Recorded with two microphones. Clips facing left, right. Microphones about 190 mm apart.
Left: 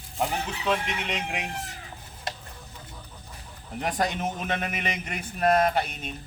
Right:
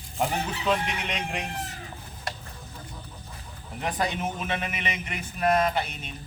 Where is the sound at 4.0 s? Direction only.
45° left (ahead or behind).